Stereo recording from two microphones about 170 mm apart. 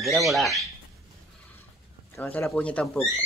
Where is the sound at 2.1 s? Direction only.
15° left (ahead or behind).